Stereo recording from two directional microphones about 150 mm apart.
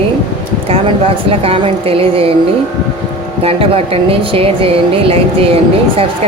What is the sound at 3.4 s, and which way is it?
Speech, 40° right (ahead or behind).